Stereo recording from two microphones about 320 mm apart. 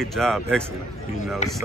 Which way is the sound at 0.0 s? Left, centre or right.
Centre.